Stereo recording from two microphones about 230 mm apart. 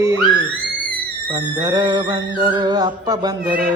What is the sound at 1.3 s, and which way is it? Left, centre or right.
Music, centre.